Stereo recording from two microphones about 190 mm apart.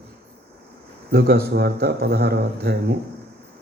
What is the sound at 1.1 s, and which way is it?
A man's voice, 55° right (ahead or behind).